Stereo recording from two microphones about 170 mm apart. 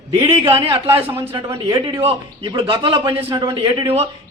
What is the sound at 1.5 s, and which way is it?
A man's voice, 25° right (ahead or behind).